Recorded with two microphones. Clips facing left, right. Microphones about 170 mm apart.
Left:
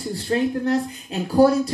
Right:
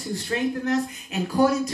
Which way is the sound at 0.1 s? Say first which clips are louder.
Left 3 dB; 35° left (ahead or behind).